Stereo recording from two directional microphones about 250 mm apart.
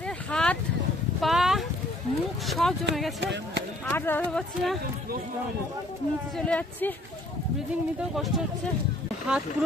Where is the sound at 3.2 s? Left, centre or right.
Right.